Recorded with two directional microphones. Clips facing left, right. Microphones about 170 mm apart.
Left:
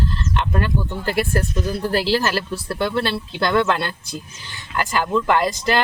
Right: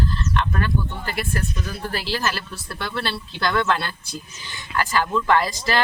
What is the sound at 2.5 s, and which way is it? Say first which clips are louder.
Speech: left 8 dB; 25° left (ahead or behind).